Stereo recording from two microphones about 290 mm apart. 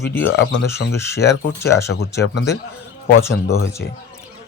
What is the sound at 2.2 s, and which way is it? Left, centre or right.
Speech, left.